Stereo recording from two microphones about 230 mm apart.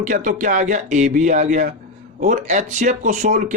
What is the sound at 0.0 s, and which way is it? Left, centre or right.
Speech, right.